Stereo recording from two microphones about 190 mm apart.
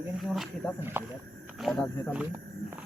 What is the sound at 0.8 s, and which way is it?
Speech, 10° right (ahead or behind).